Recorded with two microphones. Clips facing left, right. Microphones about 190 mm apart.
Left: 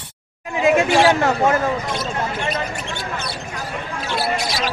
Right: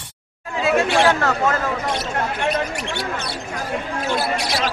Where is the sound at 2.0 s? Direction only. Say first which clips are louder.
Right 1 dB; 70° right (ahead or behind).